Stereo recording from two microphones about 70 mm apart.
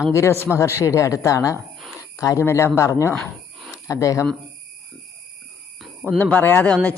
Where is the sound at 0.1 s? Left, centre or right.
Left.